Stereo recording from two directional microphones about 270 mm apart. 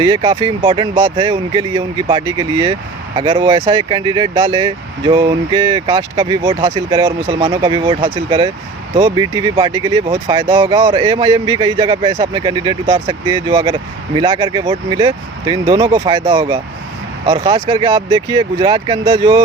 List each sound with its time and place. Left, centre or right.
0.0 s speech: centre